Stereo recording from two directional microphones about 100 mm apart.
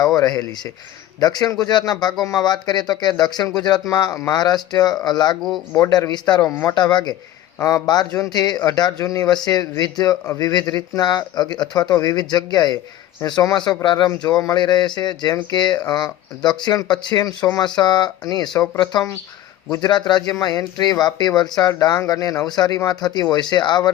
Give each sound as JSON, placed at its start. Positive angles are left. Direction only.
{"t": 0.2, "sound": "speech", "side_deg": 40}
{"t": 21.7, "sound": "speech", "side_deg": 35}